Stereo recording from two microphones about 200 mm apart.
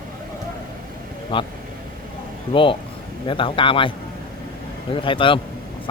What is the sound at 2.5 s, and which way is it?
Speech, 25° left (ahead or behind).